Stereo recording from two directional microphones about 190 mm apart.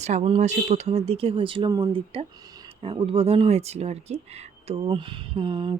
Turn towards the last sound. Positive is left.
turn(degrees=-25)  # may be behind; listen again after turning